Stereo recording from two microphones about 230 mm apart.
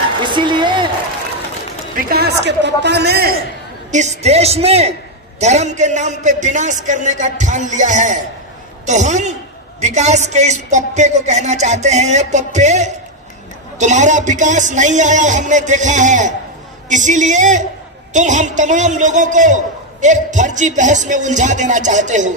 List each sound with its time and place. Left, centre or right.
0.2 s a sound: right
2.0 s a woman's voice: right
3.9 s a woman's voice: right